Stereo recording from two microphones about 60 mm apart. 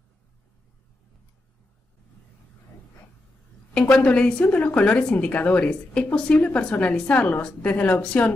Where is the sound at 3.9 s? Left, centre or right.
Left.